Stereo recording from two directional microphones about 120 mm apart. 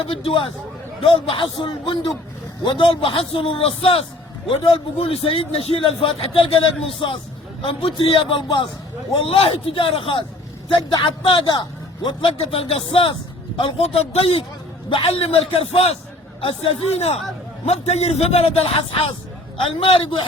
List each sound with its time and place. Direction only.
0.0 s a man's voice: 50° left (ahead or behind)